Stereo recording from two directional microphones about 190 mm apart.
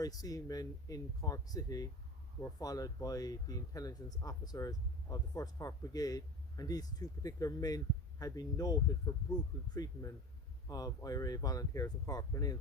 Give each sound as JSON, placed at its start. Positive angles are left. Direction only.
{"t": 0.0, "sound": "speech", "side_deg": 20}